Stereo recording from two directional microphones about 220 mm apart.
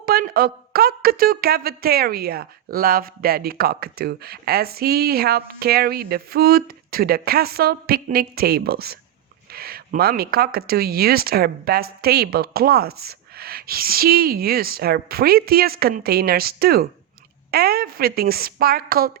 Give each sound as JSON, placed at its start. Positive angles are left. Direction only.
{"t": 0.0, "sound": "speech", "side_deg": -40}